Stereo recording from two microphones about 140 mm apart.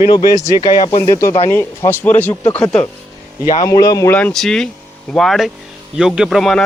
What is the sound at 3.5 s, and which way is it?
Speech, 25° left (ahead or behind).